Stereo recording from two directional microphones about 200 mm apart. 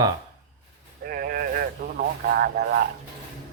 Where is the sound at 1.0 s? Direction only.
50° right (ahead or behind).